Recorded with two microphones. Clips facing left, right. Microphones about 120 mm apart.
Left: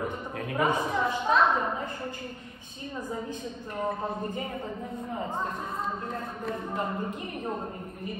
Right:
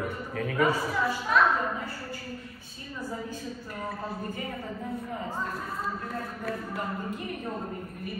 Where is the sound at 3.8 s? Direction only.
20° left (ahead or behind).